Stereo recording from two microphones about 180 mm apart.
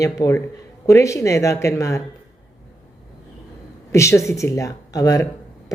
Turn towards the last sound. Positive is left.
turn(degrees=20)  # may be behind; listen again after turning